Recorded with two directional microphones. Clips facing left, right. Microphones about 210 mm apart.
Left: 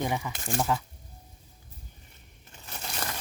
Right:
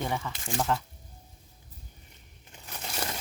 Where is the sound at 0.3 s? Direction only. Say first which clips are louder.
Left 2 dB; 45° left (ahead or behind).